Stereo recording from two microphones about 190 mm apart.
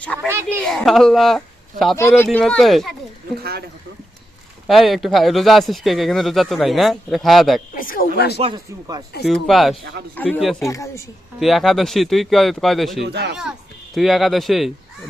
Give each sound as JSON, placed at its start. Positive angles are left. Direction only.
{"t": 0.0, "sound": "speech", "side_deg": 5}
{"t": 4.6, "sound": "speech", "side_deg": 0}
{"t": 7.8, "sound": "speech", "side_deg": 45}
{"t": 8.4, "sound": "speech", "side_deg": -25}
{"t": 9.2, "sound": "speech", "side_deg": 0}
{"t": 11.3, "sound": "speech", "side_deg": 0}
{"t": 13.0, "sound": "speech", "side_deg": -65}
{"t": 13.3, "sound": "speech", "side_deg": -5}